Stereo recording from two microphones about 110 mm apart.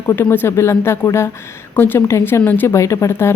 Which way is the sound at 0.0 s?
25° left (ahead or behind).